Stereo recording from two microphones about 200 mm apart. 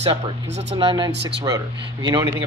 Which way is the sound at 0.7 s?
25° right (ahead or behind).